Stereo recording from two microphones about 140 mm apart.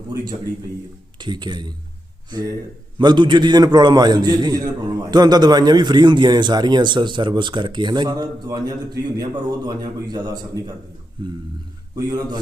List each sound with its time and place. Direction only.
1.2 s a man's voice: 30° right (ahead or behind)
3.0 s a man's voice: 35° right (ahead or behind)